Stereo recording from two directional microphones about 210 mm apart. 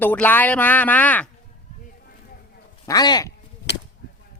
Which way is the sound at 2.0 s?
45° left (ahead or behind).